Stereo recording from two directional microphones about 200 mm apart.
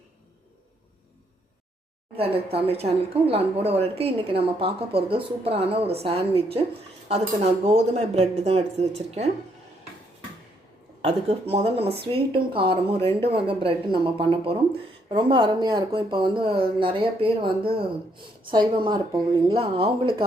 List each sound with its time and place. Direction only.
2.1 s speech: 30° right (ahead or behind)
7.6 s speech: 30° right (ahead or behind)
11.0 s speech: 30° right (ahead or behind)